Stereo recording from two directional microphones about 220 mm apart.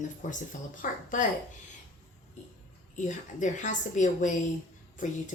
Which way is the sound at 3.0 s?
35° left (ahead or behind).